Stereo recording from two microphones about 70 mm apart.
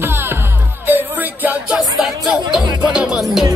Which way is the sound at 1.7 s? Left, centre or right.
Centre.